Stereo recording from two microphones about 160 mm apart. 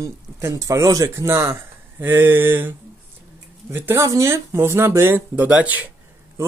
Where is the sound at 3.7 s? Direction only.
15° right (ahead or behind).